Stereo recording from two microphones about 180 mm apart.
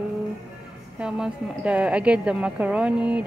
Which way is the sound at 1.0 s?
5° right (ahead or behind).